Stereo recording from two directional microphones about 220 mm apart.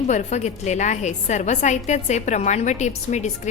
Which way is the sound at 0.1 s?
30° left (ahead or behind).